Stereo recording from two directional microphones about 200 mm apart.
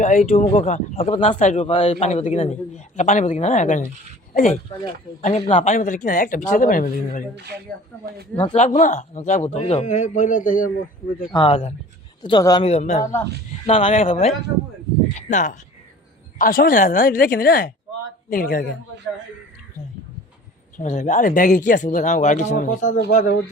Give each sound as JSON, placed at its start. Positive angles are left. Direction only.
{"t": 0.0, "sound": "speech", "side_deg": 40}
{"t": 5.2, "sound": "speech", "side_deg": 35}
{"t": 7.3, "sound": "speech", "side_deg": -55}
{"t": 8.5, "sound": "speech", "side_deg": 35}
{"t": 11.3, "sound": "speech", "side_deg": 25}
{"t": 12.6, "sound": "speech", "side_deg": 35}
{"t": 13.0, "sound": "speech", "side_deg": 15}
{"t": 13.7, "sound": "speech", "side_deg": 30}
{"t": 20.7, "sound": "speech", "side_deg": 40}